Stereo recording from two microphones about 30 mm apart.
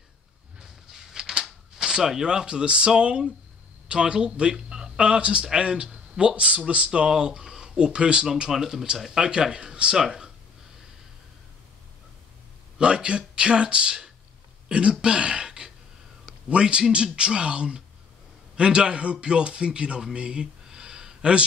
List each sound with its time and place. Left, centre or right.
0.9 s a sound: centre
1.9 s speech: centre
2.2 s speech: right
5.0 s speech: right
6.9 s speech: right
8.5 s speech: centre
9.5 s speech: right
12.7 s speech: right
20.2 s a sound: right